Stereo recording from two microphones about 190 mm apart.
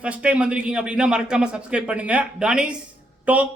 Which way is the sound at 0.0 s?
5° right (ahead or behind).